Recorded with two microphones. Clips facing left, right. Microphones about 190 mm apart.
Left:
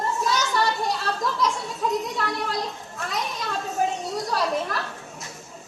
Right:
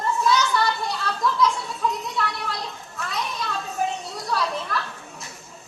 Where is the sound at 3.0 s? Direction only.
45° left (ahead or behind).